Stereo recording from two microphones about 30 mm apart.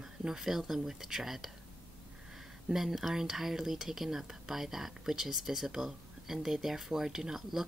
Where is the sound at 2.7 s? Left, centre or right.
Centre.